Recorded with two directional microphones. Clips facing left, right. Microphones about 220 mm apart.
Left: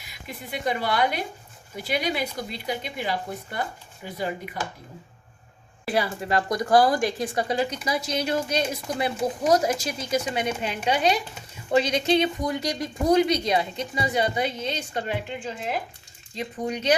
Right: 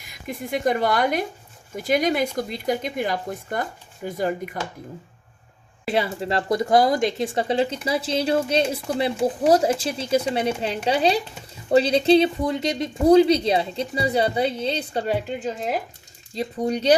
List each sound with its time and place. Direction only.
0.3 s speech: 45° right (ahead or behind)
5.8 s a woman's voice: 25° right (ahead or behind)